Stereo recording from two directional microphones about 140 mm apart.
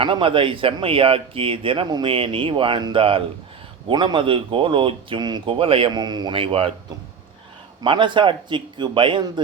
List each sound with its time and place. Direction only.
0.0 s speech: 40° right (ahead or behind)
7.8 s speech: 35° right (ahead or behind)